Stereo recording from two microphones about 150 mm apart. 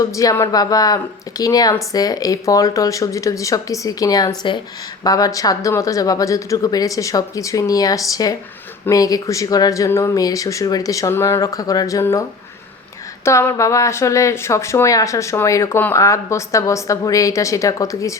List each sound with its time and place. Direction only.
0.0 s speech: 20° left (ahead or behind)
13.2 s speech: 20° left (ahead or behind)